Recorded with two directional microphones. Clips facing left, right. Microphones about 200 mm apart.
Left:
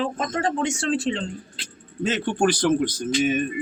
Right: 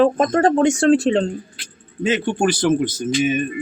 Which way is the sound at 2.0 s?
Centre (ahead or behind).